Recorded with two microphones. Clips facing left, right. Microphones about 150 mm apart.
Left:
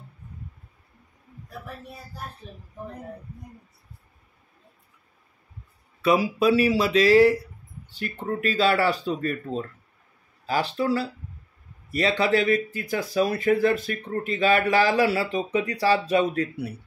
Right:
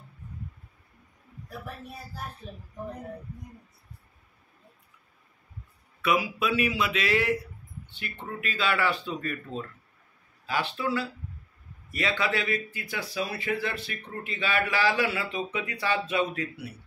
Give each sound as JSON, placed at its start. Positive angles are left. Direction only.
{"t": 6.0, "sound": "speech", "side_deg": 35}